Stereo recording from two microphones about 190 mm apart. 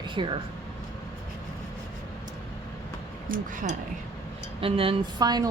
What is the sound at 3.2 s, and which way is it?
Speech, 40° right (ahead or behind).